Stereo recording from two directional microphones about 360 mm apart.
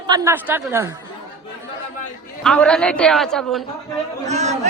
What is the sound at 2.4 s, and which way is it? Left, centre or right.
A woman's voice, centre.